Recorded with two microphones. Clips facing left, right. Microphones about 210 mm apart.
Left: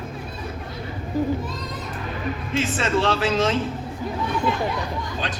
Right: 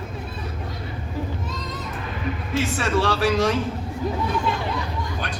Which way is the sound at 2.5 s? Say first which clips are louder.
Even; 20° left (ahead or behind).